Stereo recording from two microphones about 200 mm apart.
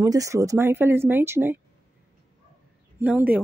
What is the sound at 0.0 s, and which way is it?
Speech, 15° right (ahead or behind).